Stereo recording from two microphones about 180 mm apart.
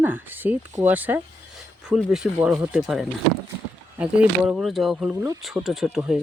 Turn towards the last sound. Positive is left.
turn(degrees=-5)  # may be behind; listen again after turning